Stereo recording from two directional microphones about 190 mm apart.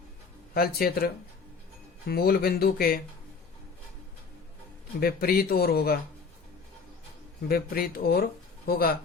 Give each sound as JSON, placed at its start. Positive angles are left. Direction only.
{"t": 0.5, "sound": "speech", "side_deg": 50}
{"t": 4.9, "sound": "speech", "side_deg": 50}
{"t": 7.4, "sound": "speech", "side_deg": 50}